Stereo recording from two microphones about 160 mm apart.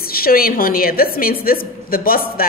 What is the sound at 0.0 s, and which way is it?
A woman's voice, 65° left (ahead or behind).